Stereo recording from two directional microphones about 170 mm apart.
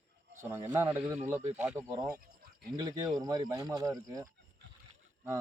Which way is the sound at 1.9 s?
20° right (ahead or behind).